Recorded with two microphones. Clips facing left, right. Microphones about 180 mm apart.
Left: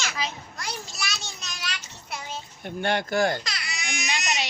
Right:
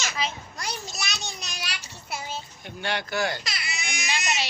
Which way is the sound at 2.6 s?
50° left (ahead or behind).